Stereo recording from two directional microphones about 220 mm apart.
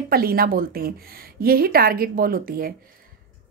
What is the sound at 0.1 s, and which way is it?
A woman's voice, 40° right (ahead or behind).